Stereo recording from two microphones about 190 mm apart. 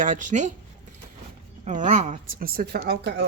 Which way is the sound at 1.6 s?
40° right (ahead or behind).